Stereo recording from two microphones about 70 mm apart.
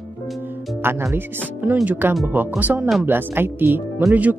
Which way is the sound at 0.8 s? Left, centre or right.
Right.